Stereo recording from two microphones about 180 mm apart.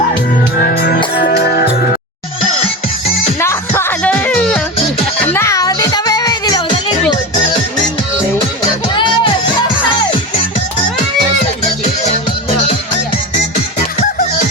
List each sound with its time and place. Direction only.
0.6 s music: 55° left (ahead or behind)
3.4 s music: 15° left (ahead or behind)
9.0 s music: 25° left (ahead or behind)